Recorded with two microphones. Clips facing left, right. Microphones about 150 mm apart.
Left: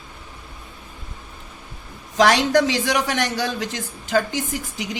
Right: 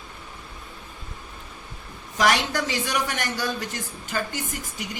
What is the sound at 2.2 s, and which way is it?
Speech, 70° left (ahead or behind).